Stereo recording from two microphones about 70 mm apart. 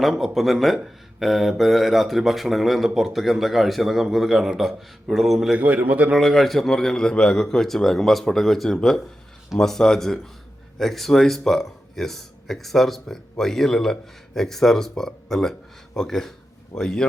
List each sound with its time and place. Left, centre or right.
0.0 s speech: centre
5.5 s a man's voice: right
6.1 s speech: centre